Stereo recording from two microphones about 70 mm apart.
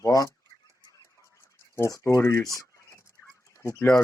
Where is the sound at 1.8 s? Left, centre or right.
Left.